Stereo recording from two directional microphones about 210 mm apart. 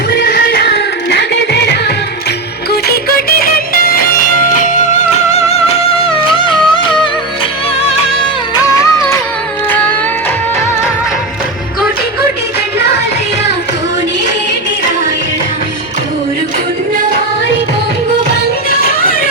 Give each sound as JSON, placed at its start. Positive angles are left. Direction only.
{"t": 0.2, "sound": "music", "side_deg": 45}
{"t": 2.8, "sound": "music", "side_deg": 45}
{"t": 8.7, "sound": "music", "side_deg": 15}